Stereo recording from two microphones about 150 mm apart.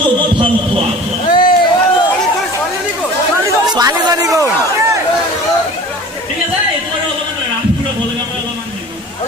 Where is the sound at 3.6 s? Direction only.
25° right (ahead or behind).